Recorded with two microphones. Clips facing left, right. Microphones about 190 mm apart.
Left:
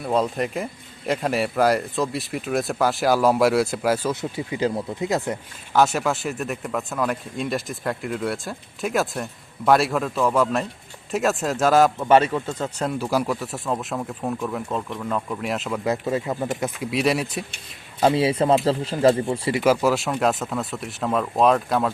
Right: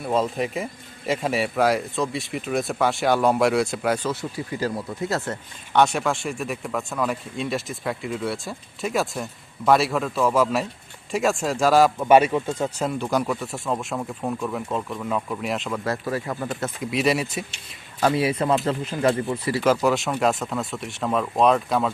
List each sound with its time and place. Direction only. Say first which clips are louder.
0.0 s speech: left 1 dB; centre (ahead or behind)
4.1 s speech: left 2 dB; 20° left (ahead or behind)
5.7 s speech: even; centre (ahead or behind)
11.9 s speech: right 1 dB; 10° right (ahead or behind)
12.8 s speech: left 3 dB; centre (ahead or behind)
15.8 s speech: left 3 dB; 20° left (ahead or behind)
16.8 s speech: right 1 dB; centre (ahead or behind)
18.0 s speech: left 2 dB; 25° left (ahead or behind)
19.6 s speech: left 1 dB; 5° left (ahead or behind)